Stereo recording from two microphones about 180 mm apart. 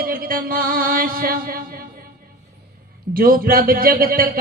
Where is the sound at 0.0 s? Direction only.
55° right (ahead or behind).